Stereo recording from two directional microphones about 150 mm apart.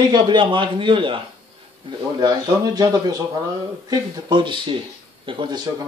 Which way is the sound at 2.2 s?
25° right (ahead or behind).